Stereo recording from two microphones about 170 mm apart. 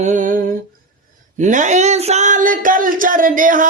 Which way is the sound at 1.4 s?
50° right (ahead or behind).